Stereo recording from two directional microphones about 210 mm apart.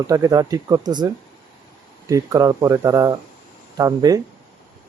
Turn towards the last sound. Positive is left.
turn(degrees=-15)  # may be behind; listen again after turning